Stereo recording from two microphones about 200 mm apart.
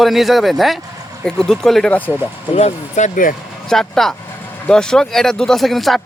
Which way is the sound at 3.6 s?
5° left (ahead or behind).